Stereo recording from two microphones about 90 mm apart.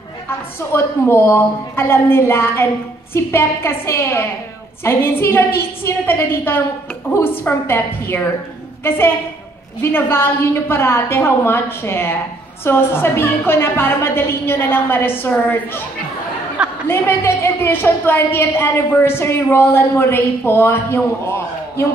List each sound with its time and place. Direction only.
0.7 s a woman's voice: 30° left (ahead or behind)
16.8 s a woman's voice: 25° left (ahead or behind)